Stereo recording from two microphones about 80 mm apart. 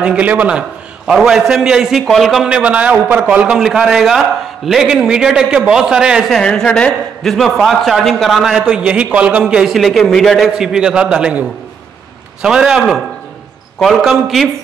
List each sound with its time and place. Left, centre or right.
0.0 s a man's voice: centre
2.4 s a man's voice: centre
3.3 s a man's voice: centre
6.3 s a man's voice: centre